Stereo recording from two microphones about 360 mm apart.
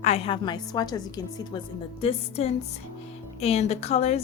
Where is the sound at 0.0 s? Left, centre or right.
Centre.